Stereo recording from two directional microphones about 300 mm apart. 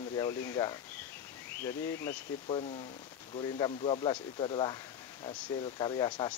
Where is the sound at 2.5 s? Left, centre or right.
Centre.